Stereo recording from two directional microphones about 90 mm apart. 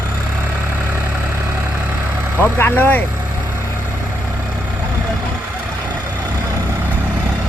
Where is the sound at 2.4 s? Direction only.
25° left (ahead or behind).